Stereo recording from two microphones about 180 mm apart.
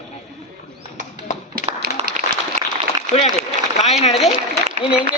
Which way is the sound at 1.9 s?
60° left (ahead or behind).